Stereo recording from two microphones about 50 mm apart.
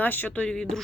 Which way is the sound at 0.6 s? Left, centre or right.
Centre.